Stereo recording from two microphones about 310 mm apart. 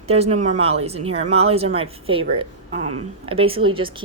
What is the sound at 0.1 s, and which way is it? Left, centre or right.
Speech, centre.